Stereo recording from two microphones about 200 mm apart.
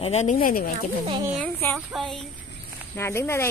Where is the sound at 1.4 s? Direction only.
10° left (ahead or behind).